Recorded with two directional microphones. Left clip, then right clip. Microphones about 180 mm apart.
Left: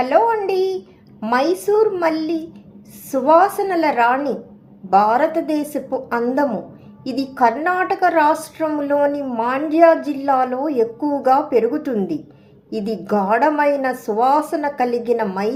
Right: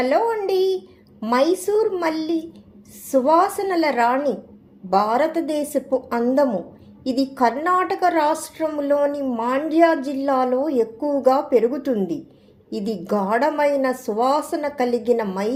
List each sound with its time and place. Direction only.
0.0 s a woman's voice: 25° right (ahead or behind)